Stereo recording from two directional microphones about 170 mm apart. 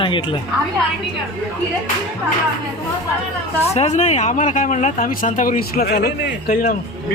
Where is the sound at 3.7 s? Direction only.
40° left (ahead or behind); by 6.8 s 55° left (ahead or behind).